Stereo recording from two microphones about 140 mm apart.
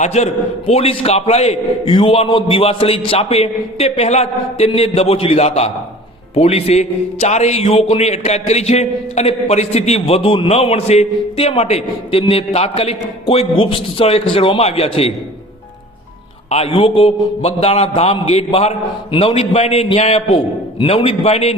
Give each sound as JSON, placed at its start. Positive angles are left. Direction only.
{"t": 0.0, "sound": "a man's voice", "side_deg": 55}
{"t": 16.5, "sound": "a man's voice", "side_deg": 45}